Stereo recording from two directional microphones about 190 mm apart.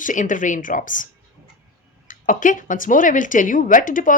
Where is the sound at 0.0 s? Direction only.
45° left (ahead or behind).